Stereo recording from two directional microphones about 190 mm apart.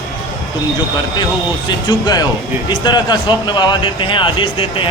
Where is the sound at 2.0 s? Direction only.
20° left (ahead or behind).